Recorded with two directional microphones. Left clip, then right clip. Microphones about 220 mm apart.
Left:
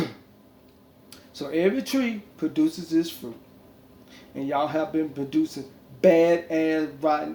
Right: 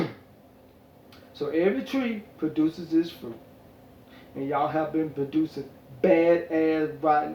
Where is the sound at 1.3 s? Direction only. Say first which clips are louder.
Left 1 dB; 40° left (ahead or behind).